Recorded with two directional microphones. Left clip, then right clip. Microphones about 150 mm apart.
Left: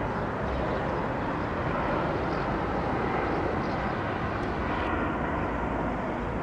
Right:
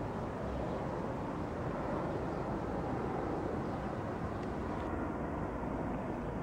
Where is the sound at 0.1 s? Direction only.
20° left (ahead or behind).